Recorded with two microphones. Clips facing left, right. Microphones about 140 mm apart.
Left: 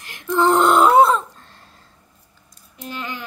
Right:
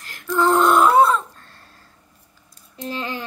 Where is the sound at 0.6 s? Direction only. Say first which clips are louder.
Left 1 dB; 15° left (ahead or behind).